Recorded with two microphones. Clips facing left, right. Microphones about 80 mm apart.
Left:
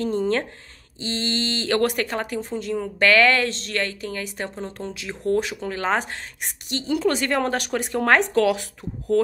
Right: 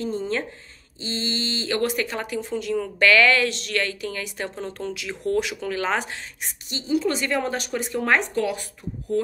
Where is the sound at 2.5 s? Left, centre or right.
Left.